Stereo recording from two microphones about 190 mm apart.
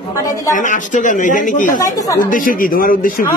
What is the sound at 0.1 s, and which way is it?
Speech, 15° left (ahead or behind).